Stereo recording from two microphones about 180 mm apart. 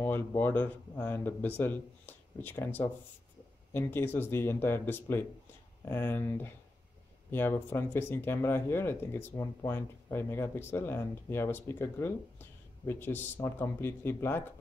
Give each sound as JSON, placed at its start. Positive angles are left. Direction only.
{"t": 0.0, "sound": "speech", "side_deg": 15}